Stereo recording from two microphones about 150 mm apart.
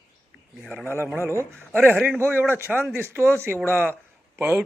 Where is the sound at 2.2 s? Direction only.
15° right (ahead or behind).